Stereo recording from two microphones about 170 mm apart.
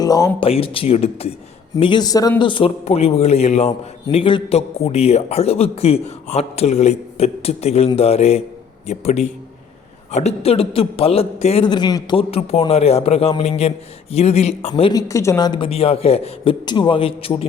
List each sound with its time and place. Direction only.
0.0 s speech: 20° left (ahead or behind)
0.3 s a man's voice: 35° left (ahead or behind)
1.8 s a man's voice: 25° left (ahead or behind)
14.7 s a man's voice: 25° left (ahead or behind)